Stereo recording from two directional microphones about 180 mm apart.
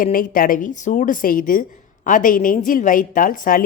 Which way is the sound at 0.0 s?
50° left (ahead or behind).